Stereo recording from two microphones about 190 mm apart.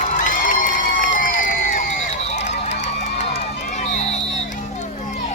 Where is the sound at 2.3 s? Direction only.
35° left (ahead or behind).